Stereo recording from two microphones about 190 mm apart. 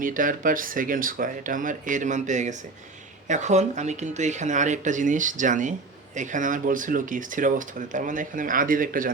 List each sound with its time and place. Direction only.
0.0 s speech: 45° right (ahead or behind)